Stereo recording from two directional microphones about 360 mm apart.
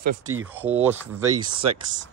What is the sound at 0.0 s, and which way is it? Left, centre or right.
Speech, right.